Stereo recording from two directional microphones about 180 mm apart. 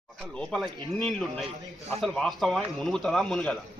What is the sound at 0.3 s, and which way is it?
Speech, 5° left (ahead or behind).